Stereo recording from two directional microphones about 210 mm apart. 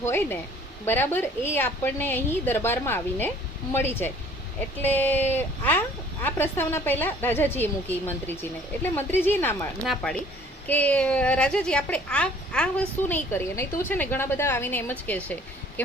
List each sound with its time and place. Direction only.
0.0 s speech: 10° left (ahead or behind)